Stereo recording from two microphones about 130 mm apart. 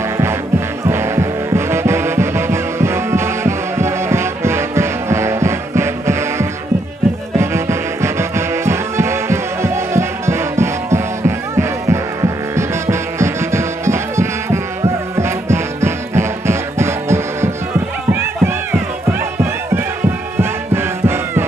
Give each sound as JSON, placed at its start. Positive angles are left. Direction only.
{"t": 0.8, "sound": "music", "side_deg": -20}
{"t": 20.3, "sound": "music", "side_deg": -20}